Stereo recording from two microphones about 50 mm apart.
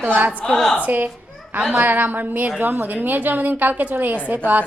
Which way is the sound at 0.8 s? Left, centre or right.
Right.